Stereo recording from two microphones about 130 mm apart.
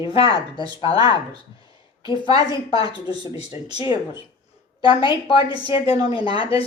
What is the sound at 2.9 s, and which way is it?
Speech, 40° left (ahead or behind).